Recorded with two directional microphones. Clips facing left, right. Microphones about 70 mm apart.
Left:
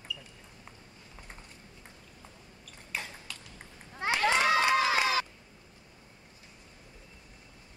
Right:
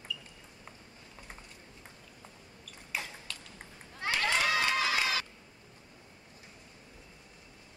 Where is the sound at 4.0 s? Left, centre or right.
Left.